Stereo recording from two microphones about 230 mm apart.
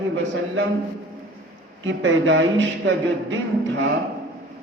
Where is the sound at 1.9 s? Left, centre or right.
Right.